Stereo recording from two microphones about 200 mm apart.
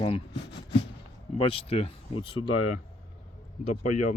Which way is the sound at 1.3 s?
30° left (ahead or behind).